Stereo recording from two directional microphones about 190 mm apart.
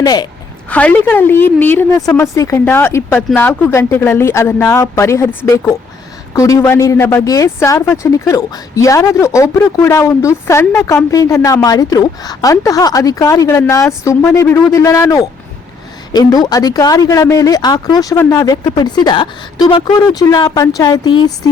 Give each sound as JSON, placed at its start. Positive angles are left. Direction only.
{"t": 0.0, "sound": "speech", "side_deg": 20}
{"t": 0.7, "sound": "speech", "side_deg": 5}